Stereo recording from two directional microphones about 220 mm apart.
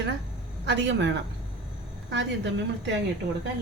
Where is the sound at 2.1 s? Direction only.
55° right (ahead or behind).